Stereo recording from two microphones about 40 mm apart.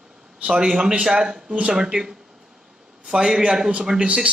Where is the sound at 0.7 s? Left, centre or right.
Centre.